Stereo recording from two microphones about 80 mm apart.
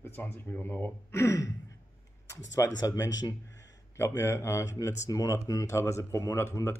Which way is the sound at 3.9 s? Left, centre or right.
Left.